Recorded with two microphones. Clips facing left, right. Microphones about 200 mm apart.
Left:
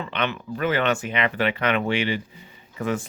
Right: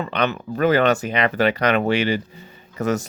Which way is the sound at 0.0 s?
40° right (ahead or behind).